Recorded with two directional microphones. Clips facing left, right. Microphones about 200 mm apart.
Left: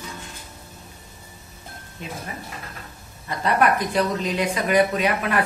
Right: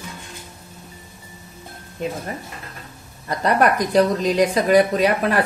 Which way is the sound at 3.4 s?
40° right (ahead or behind).